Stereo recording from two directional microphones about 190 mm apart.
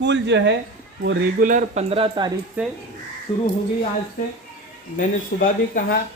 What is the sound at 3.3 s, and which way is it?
Speech, 25° left (ahead or behind).